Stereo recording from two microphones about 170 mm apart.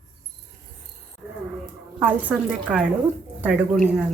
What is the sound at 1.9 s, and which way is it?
A woman's voice, 10° right (ahead or behind).